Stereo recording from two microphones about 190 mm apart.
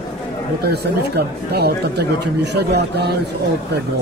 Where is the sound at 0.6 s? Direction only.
55° right (ahead or behind).